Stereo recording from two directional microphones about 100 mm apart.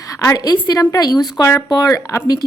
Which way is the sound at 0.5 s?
45° left (ahead or behind).